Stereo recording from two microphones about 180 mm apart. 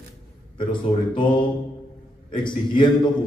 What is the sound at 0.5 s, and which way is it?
Speech, 25° left (ahead or behind).